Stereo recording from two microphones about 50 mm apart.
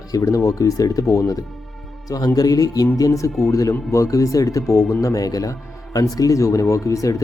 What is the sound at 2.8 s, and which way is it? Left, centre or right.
Speech, left.